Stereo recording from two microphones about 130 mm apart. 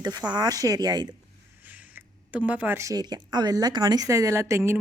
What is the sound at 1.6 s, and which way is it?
Speech, 10° right (ahead or behind).